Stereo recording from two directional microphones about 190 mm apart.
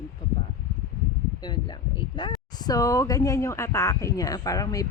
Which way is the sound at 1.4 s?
25° left (ahead or behind).